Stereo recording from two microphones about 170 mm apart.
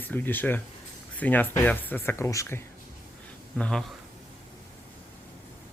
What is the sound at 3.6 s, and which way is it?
Speech, 5° left (ahead or behind).